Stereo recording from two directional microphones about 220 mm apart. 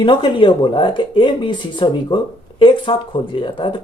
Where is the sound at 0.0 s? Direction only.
20° left (ahead or behind).